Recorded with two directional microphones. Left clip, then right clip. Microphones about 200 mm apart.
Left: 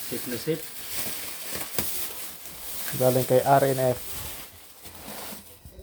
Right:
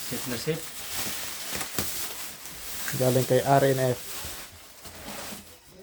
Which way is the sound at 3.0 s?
Centre (ahead or behind).